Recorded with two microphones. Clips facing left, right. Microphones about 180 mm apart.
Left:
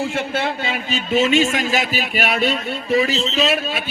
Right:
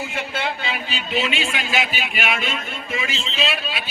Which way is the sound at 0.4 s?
45° left (ahead or behind).